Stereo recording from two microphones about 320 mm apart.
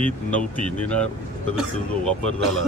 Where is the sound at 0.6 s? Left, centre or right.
Centre.